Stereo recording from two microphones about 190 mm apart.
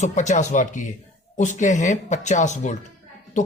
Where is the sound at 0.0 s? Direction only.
40° left (ahead or behind).